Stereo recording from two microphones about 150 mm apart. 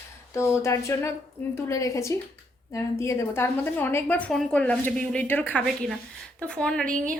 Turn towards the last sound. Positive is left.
turn(degrees=5)  # may be behind; listen again after turning